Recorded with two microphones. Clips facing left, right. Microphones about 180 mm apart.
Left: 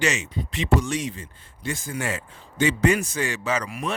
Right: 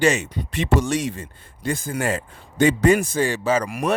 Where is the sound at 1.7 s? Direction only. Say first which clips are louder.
Right 5 dB; 55° right (ahead or behind).